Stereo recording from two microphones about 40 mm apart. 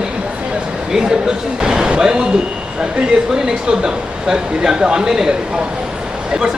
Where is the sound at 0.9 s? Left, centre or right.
Centre.